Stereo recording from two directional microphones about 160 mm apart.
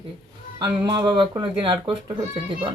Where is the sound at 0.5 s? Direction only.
25° right (ahead or behind).